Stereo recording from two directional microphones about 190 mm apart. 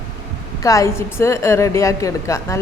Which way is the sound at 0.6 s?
15° left (ahead or behind).